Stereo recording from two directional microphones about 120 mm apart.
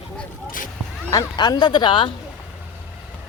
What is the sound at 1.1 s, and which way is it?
Speech, 35° left (ahead or behind).